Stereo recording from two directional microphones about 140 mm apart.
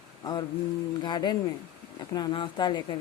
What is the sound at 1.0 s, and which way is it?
A woman's voice, 30° left (ahead or behind).